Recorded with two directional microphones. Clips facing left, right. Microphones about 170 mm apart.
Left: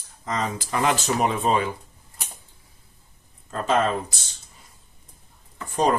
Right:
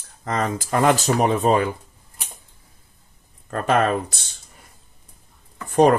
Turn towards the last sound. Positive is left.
turn(degrees=-60)  # may be behind; listen again after turning